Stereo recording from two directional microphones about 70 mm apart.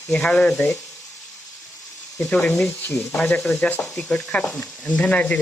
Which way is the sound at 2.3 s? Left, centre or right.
Centre.